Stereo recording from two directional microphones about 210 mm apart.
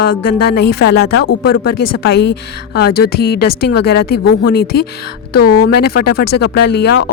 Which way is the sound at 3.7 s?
50° left (ahead or behind).